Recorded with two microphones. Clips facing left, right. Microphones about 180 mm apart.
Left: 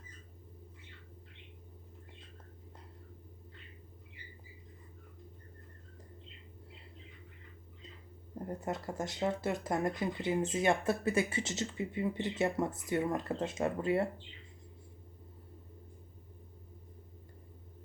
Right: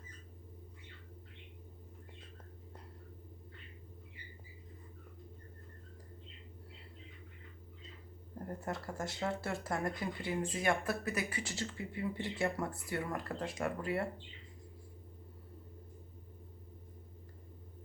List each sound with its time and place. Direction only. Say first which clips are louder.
8.4 s speech: left 3 dB; 20° left (ahead or behind)